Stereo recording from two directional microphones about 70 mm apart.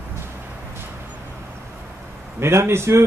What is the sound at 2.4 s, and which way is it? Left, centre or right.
Speech, right.